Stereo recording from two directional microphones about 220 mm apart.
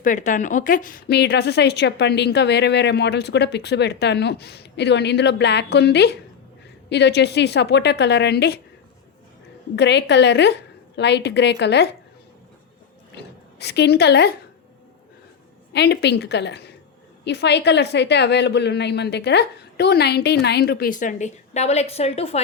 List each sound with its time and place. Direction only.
0.0 s a woman's voice: 35° left (ahead or behind)
9.7 s a woman's voice: 50° left (ahead or behind)
13.6 s a woman's voice: 50° left (ahead or behind)
15.7 s a woman's voice: 50° left (ahead or behind); by 22.4 s 25° left (ahead or behind)